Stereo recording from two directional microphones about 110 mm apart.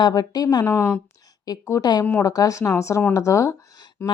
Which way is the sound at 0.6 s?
20° left (ahead or behind).